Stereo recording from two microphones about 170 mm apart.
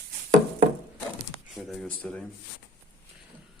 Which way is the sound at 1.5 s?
5° left (ahead or behind).